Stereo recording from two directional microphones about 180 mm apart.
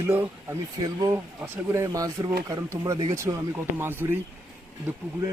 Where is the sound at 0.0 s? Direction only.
10° right (ahead or behind).